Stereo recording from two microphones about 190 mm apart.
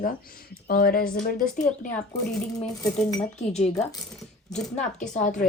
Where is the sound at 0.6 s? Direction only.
50° left (ahead or behind).